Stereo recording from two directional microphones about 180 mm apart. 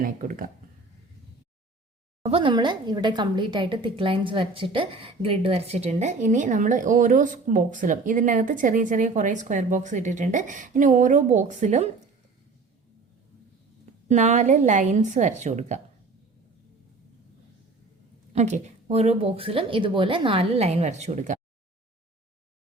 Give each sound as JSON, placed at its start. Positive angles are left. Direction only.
{"t": 0.0, "sound": "speech", "side_deg": -50}
{"t": 2.2, "sound": "speech", "side_deg": -30}
{"t": 14.1, "sound": "a woman's voice", "side_deg": -40}
{"t": 18.3, "sound": "a woman's voice", "side_deg": -40}